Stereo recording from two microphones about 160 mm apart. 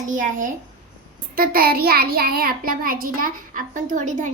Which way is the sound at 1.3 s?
70° right (ahead or behind).